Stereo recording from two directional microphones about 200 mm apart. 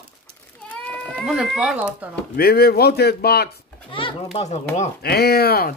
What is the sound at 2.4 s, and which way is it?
Speech, 50° left (ahead or behind).